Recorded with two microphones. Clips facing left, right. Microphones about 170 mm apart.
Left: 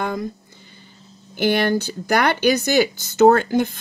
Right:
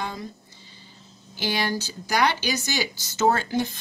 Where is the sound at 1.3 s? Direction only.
55° left (ahead or behind).